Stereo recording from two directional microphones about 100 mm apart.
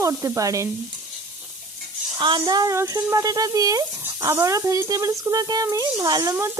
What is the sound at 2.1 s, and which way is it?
Speech, 50° right (ahead or behind).